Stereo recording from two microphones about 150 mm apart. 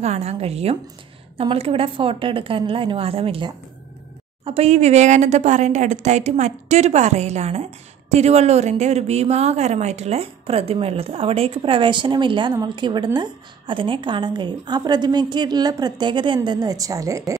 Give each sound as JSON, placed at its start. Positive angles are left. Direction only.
{"t": 0.0, "sound": "a woman's voice", "side_deg": -45}